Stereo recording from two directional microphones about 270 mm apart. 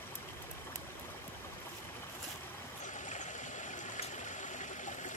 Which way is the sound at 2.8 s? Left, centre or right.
Left.